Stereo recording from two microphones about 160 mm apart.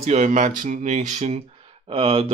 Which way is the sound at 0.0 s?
50° right (ahead or behind).